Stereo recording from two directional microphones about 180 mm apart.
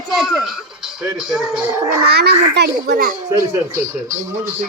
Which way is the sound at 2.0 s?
65° right (ahead or behind).